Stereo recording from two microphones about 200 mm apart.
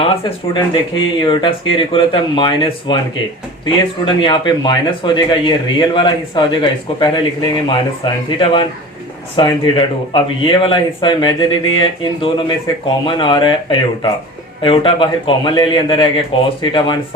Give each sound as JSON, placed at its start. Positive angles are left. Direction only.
{"t": 0.5, "sound": "speech", "side_deg": 25}
{"t": 4.0, "sound": "speech", "side_deg": 25}